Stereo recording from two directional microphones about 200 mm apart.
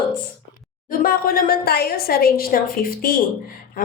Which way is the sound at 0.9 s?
45° left (ahead or behind).